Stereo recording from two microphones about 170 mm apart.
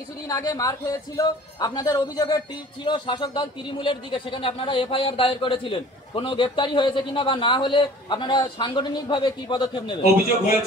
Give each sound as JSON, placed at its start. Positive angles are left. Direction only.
{"t": 0.3, "sound": "speech", "side_deg": 20}